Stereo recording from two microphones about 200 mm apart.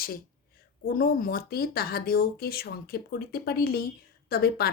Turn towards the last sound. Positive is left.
turn(degrees=50)  # may be behind; listen again after turning